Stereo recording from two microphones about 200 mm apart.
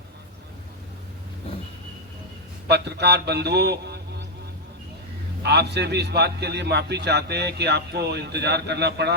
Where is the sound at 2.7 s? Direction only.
55° right (ahead or behind).